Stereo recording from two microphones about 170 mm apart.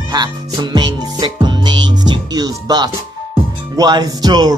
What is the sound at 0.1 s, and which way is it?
Music, 25° right (ahead or behind).